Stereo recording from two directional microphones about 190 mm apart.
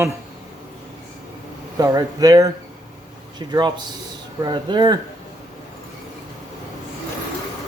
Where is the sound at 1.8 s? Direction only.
20° right (ahead or behind).